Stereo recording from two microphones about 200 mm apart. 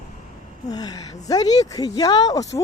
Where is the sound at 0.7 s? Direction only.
20° left (ahead or behind).